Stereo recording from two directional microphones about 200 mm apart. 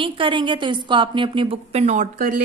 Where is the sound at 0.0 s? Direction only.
25° right (ahead or behind).